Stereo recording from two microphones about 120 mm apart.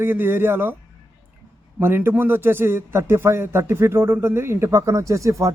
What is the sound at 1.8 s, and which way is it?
A man's voice, 20° right (ahead or behind).